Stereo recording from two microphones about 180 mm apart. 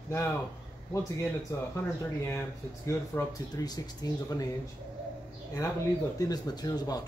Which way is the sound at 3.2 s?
20° left (ahead or behind).